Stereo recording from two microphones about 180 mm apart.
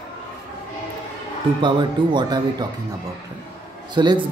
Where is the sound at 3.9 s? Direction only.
25° right (ahead or behind).